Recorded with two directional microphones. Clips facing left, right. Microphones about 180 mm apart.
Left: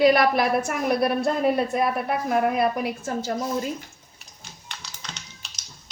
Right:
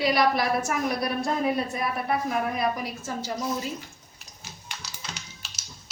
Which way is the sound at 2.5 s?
55° left (ahead or behind).